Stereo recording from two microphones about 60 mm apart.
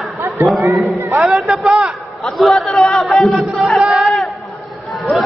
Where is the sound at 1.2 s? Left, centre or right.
Centre.